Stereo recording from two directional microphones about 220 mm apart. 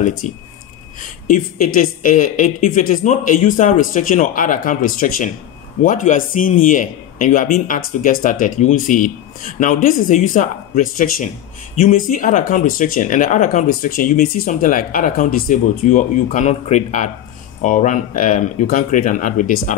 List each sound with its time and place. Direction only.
0.2 s speech: 35° left (ahead or behind)